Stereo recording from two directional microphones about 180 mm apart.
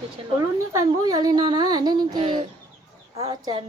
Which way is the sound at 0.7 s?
20° right (ahead or behind).